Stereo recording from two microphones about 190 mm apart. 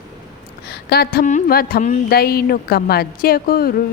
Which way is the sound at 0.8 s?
55° left (ahead or behind).